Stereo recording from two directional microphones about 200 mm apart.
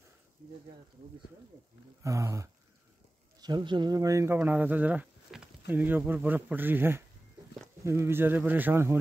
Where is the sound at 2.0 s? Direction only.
15° right (ahead or behind).